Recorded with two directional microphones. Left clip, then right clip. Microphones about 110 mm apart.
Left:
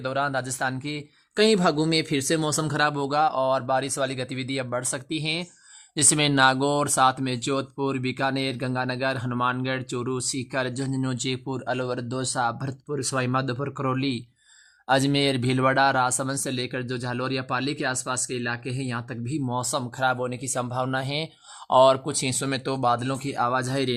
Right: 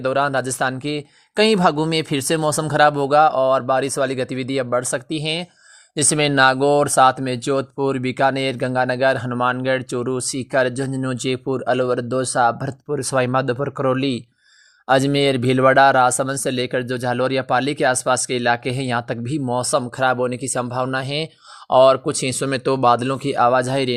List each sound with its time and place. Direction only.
0.0 s speech: 35° right (ahead or behind); by 19.4 s 55° right (ahead or behind)
19.5 s speech: 35° right (ahead or behind)